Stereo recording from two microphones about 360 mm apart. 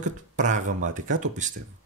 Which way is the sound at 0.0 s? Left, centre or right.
Right.